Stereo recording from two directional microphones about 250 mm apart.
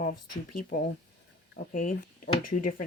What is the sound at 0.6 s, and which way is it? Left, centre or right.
Speech, left.